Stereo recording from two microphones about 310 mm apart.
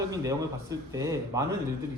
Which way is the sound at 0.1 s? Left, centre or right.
Centre.